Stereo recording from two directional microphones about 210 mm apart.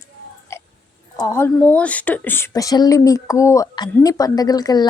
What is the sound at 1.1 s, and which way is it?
A woman's voice, 15° left (ahead or behind).